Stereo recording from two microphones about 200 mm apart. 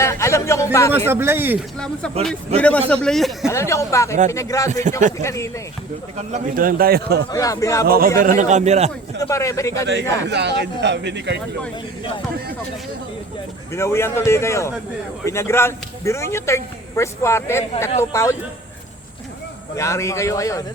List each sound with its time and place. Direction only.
0.0 s speech: 15° left (ahead or behind)
1.1 s speech: 10° right (ahead or behind)
1.8 s speech: 5° left (ahead or behind)
3.4 s speech: 15° left (ahead or behind)
4.7 s a man's voice: 35° right (ahead or behind)
5.2 s speech: 15° left (ahead or behind)
6.1 s a man's voice: 35° right (ahead or behind)
7.3 s speech: 15° left (ahead or behind)
7.9 s a man's voice: 50° right (ahead or behind)
9.2 s speech: 15° left (ahead or behind)
10.2 s speech: 60° right (ahead or behind)
13.7 s speech: 15° left (ahead or behind)
19.7 s speech: 15° left (ahead or behind)